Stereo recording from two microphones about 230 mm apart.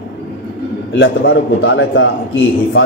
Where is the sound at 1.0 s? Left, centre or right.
Left.